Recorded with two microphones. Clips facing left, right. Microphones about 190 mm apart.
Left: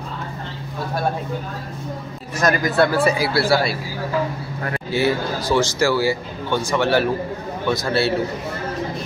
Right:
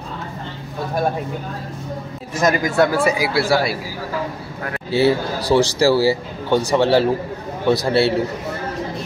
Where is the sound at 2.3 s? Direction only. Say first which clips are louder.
Right 1 dB; 20° right (ahead or behind).